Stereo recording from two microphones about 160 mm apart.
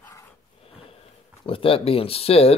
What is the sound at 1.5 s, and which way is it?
Speech, 35° left (ahead or behind).